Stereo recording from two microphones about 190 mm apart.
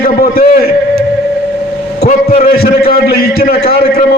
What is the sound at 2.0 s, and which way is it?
Speech, 35° left (ahead or behind).